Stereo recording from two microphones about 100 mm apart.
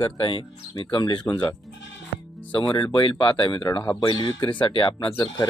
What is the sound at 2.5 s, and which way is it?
Speech, 55° left (ahead or behind).